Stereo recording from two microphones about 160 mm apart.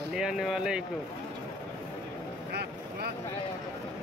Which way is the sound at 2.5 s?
90° right.